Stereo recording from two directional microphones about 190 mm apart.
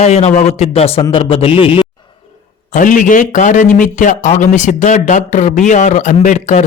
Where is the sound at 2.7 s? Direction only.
45° left (ahead or behind).